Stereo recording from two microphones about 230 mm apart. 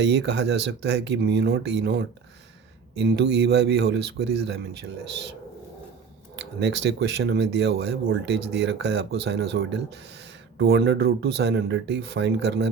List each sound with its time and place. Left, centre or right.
0.0 s a man's voice: right
6.3 s a man's voice: right